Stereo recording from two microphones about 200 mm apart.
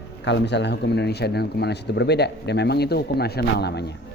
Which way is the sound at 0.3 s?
60° left (ahead or behind).